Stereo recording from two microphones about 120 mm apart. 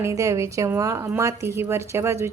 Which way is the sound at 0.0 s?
25° right (ahead or behind).